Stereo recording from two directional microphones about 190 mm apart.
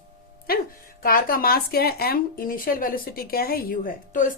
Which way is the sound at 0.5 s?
50° left (ahead or behind).